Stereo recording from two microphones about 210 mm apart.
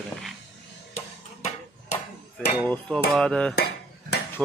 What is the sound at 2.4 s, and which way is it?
Speech, 5° left (ahead or behind).